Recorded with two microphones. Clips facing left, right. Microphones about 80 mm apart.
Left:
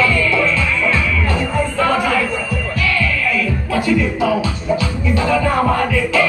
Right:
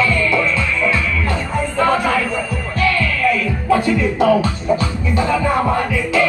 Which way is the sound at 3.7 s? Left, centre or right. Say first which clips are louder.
Right 2 dB; right.